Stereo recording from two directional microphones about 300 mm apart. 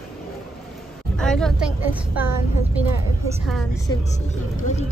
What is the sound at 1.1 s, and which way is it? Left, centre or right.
A woman's voice, centre.